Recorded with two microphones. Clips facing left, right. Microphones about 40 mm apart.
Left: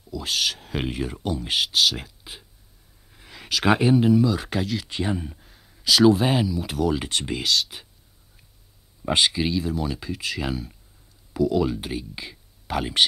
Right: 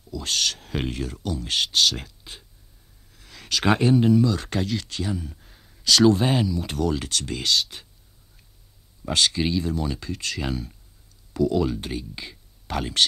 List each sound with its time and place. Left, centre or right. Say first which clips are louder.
0.1 s speech: left 1 dB; centre
3.1 s speech: even; centre
4.8 s speech: left 3 dB; left
5.3 s speech: even; centre
7.1 s speech: left 2 dB; left
7.3 s speech: right 1 dB; centre
9.0 s speech: left 2 dB; centre
9.3 s speech: even; centre